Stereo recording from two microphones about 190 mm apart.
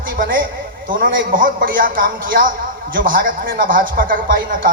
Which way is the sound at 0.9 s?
45° right (ahead or behind).